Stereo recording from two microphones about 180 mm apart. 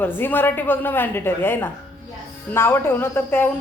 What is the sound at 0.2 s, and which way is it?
Speech, 10° left (ahead or behind).